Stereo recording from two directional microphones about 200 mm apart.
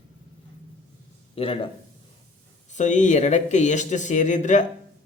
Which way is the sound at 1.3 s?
30° left (ahead or behind).